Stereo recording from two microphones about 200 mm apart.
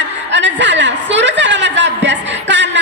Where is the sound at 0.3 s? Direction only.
65° right (ahead or behind).